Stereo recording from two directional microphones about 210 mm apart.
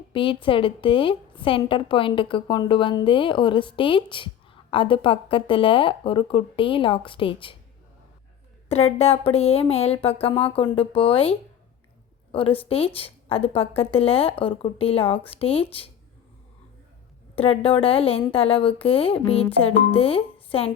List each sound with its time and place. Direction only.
0.1 s a woman's voice: 25° left (ahead or behind)
8.7 s a woman's voice: 30° left (ahead or behind)
17.3 s a woman's voice: 25° left (ahead or behind)